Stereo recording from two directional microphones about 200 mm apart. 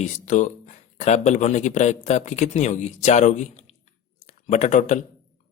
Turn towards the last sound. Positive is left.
turn(degrees=35)  # may be behind; listen again after turning